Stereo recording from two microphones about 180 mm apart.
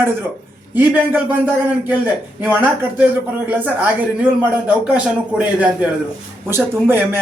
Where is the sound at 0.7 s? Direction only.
10° right (ahead or behind).